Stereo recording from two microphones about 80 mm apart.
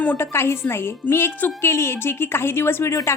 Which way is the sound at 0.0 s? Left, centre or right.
Centre.